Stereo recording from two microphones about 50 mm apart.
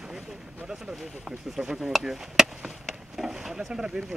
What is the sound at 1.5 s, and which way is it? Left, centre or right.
Speech, centre.